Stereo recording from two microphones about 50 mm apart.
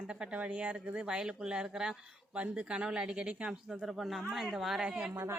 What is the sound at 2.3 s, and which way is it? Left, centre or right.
Speech, right.